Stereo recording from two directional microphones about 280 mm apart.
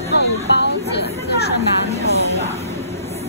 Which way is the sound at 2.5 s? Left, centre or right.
Left.